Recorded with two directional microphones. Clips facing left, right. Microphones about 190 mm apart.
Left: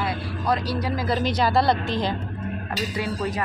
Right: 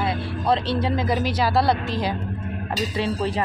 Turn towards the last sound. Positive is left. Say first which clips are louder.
# right 3 dB
turn(degrees=-30)  # may be behind; listen again after turning